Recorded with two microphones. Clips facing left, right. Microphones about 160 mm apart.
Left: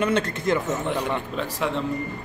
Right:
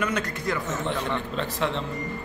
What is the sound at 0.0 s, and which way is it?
Speech, 25° left (ahead or behind).